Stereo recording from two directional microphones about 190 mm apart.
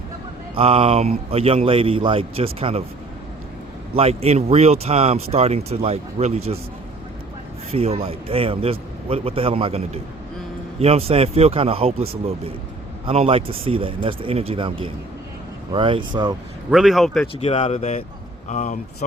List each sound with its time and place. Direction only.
0.5 s speech: 30° right (ahead or behind)
3.9 s speech: 30° right (ahead or behind)
7.7 s a man's voice: 30° right (ahead or behind)
16.7 s speech: centre (ahead or behind)
17.3 s speech: 35° left (ahead or behind)